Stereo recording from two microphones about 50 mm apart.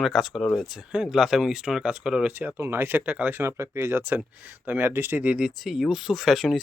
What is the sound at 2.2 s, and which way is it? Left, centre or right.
Speech, right.